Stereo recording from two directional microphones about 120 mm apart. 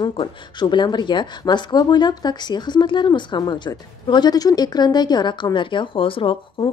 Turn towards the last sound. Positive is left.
turn(degrees=45)  # may be behind; listen again after turning